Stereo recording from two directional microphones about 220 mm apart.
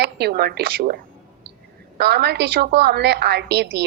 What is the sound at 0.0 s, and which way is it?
Speech, 50° right (ahead or behind).